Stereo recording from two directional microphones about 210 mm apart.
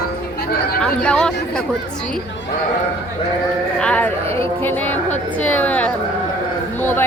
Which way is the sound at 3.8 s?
5° left (ahead or behind).